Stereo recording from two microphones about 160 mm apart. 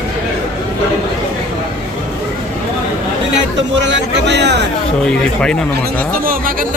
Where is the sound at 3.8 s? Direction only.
90° right.